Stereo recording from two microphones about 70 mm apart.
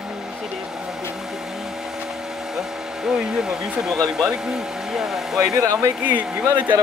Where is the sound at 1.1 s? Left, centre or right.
Centre.